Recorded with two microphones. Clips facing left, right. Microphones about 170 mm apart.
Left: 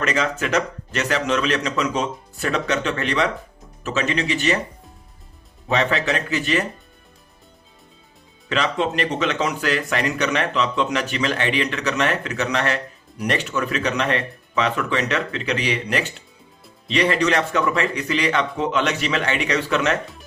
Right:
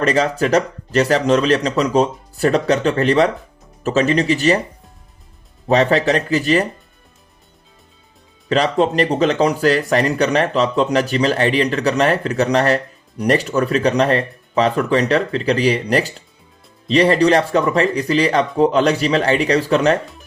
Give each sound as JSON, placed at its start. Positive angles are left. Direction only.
{"t": 0.0, "sound": "speech", "side_deg": -35}
{"t": 5.6, "sound": "speech", "side_deg": -35}
{"t": 8.4, "sound": "speech", "side_deg": -35}